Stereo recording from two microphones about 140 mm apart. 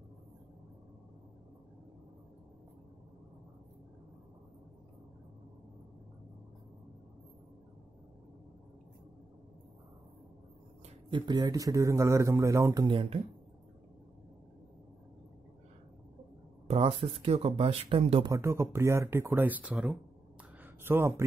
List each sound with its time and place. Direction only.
11.1 s a man's voice: 35° right (ahead or behind)
16.6 s speech: 45° right (ahead or behind)
18.2 s speech: 20° right (ahead or behind)
20.6 s a sound: 15° right (ahead or behind)